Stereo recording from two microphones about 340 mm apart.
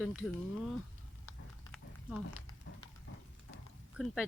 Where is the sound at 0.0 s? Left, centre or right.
Centre.